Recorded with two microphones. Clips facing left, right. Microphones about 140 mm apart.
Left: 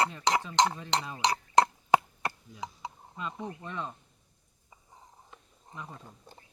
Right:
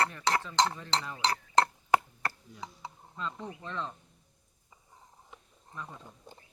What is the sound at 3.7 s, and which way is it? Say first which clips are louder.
Speech: right 2 dB; 15° left (ahead or behind).